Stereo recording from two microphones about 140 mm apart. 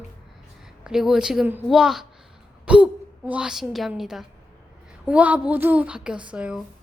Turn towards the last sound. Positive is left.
turn(degrees=-5)  # may be behind; listen again after turning